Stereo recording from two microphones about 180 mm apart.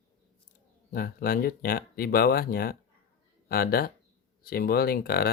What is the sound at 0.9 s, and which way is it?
Speech, 55° left (ahead or behind).